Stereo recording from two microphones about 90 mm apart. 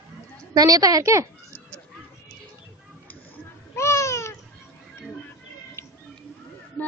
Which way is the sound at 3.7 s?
35° left (ahead or behind).